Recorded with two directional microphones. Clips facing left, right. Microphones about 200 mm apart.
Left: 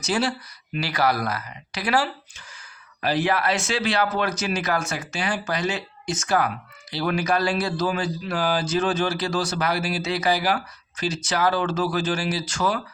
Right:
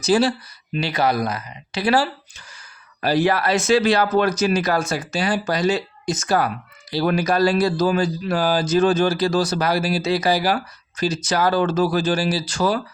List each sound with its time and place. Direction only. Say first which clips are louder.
0.0 s a man's voice: right 7 dB; 35° right (ahead or behind)